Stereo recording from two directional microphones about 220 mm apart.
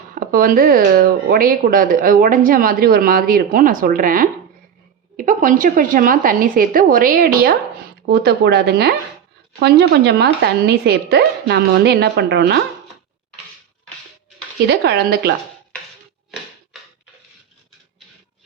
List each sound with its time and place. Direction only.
0.1 s a woman's voice: 40° right (ahead or behind)
14.7 s a woman's voice: 45° right (ahead or behind)